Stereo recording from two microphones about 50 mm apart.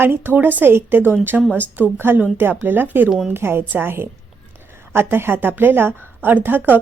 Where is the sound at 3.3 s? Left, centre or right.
Right.